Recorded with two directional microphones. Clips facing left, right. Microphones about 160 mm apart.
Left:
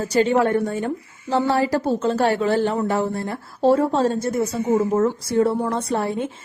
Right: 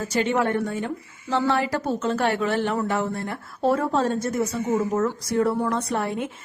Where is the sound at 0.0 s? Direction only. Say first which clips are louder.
Left 5 dB; 35° left (ahead or behind).